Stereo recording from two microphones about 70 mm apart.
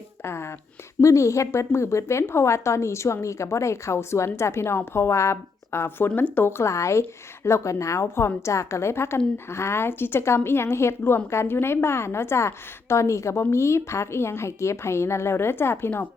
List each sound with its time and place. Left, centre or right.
0.2 s speech: left
1.0 s a woman's voice: left
6.1 s a woman's voice: left